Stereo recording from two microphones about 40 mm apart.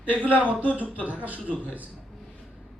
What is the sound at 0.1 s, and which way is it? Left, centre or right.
A man's voice, right.